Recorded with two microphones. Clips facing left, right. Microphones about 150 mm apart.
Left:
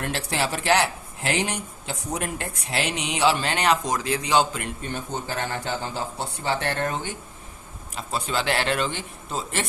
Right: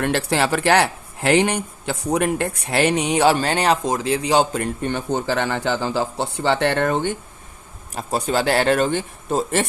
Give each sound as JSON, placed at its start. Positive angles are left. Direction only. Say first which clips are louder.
{"t": 0.0, "sound": "speech", "louder": "right 7 dB", "side_deg": -65}
{"t": 4.8, "sound": "speech", "louder": "right 8 dB", "side_deg": -75}
{"t": 7.9, "sound": "speech", "louder": "right 6 dB", "side_deg": -45}